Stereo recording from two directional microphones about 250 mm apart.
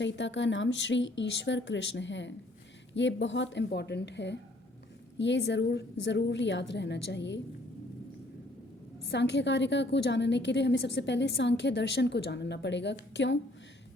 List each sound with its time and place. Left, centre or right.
0.0 s a woman's voice: left
9.0 s a woman's voice: left